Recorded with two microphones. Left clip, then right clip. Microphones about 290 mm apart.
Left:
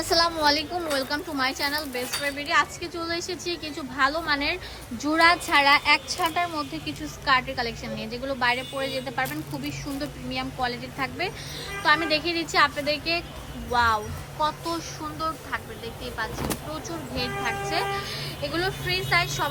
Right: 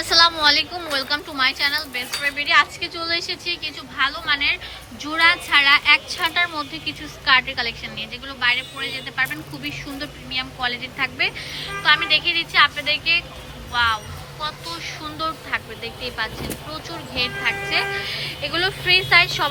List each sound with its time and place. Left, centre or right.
0.0 s a woman's voice: centre
15.4 s a woman's voice: centre